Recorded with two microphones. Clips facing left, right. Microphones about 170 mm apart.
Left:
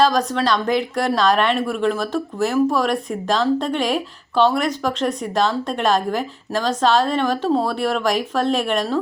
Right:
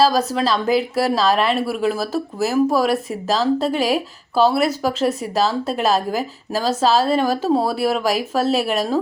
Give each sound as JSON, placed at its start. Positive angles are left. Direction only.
{"t": 0.0, "sound": "speech", "side_deg": -5}